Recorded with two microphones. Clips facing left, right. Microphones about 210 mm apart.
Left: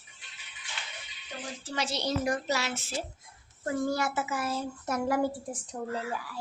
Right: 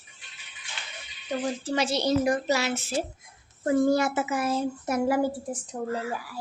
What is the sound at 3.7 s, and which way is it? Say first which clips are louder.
Speech: right 7 dB; 20° right (ahead or behind).